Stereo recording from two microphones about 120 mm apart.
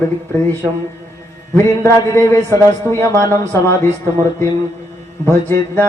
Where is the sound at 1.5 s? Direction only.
25° left (ahead or behind).